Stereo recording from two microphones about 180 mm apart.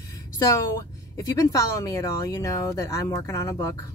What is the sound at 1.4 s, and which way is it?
Speech, 20° left (ahead or behind).